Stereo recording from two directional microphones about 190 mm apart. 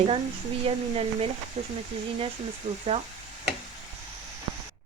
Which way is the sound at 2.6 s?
35° right (ahead or behind).